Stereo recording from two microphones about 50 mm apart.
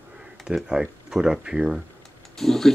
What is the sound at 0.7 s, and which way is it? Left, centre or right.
Speech, centre.